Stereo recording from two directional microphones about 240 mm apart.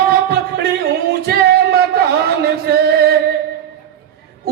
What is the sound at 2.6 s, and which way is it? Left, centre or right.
Music, right.